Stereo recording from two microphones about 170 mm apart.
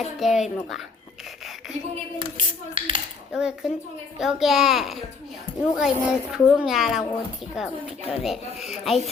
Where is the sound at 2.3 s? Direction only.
30° right (ahead or behind).